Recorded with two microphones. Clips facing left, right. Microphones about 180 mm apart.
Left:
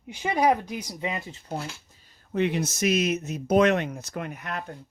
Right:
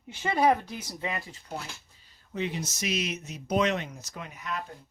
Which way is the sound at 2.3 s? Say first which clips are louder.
Left 7 dB; 60° left (ahead or behind).